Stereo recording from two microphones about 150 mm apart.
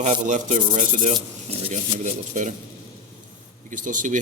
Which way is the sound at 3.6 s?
60° right (ahead or behind).